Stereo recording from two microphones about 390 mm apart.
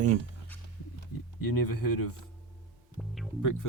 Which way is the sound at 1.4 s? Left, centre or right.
Left.